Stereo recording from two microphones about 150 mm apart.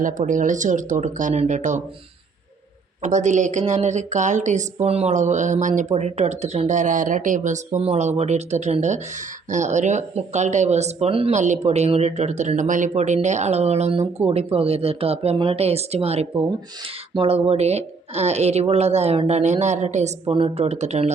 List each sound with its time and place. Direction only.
0.0 s speech: 60° right (ahead or behind)
3.0 s speech: 55° right (ahead or behind)
11.3 s speech: 50° right (ahead or behind)